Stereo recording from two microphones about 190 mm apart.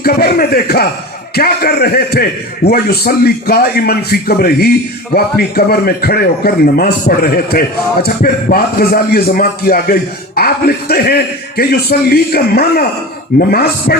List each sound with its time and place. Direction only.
0.0 s a man's voice: 55° left (ahead or behind)